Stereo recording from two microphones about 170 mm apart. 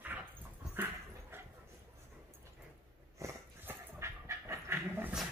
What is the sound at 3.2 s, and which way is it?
Dog, 15° right (ahead or behind).